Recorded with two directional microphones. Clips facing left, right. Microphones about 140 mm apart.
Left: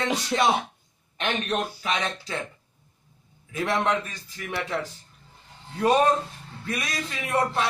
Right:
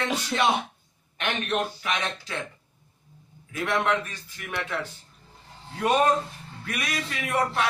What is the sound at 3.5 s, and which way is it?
Speech, 30° left (ahead or behind).